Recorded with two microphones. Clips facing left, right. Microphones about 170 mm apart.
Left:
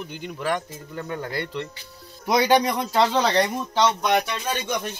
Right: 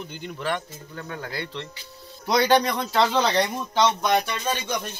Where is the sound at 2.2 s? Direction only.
15° left (ahead or behind).